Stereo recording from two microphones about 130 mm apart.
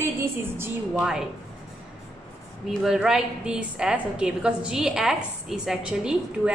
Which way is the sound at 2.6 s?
5° right (ahead or behind).